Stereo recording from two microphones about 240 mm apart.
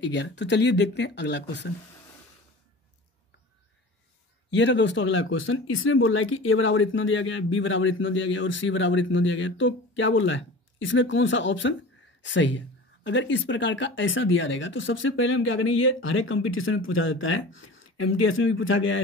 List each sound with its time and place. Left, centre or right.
0.0 s speech: left
4.5 s speech: left